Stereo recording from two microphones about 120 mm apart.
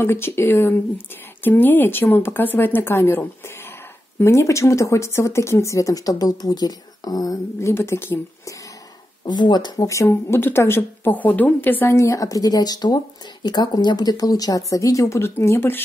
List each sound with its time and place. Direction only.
0.0 s speech: 20° left (ahead or behind)
7.7 s speech: 20° left (ahead or behind)
9.2 s speech: 35° left (ahead or behind); by 15.8 s 20° left (ahead or behind)